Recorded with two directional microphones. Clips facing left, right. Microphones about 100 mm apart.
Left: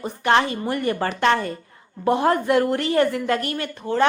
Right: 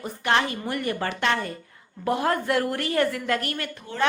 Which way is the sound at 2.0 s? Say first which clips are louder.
Left 5 dB; 25° left (ahead or behind).